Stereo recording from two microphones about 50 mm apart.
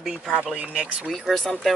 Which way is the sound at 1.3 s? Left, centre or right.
Centre.